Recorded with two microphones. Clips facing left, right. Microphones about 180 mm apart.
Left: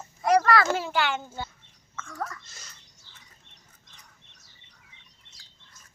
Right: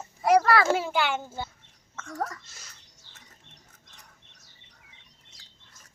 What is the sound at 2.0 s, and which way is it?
Speech, 40° right (ahead or behind).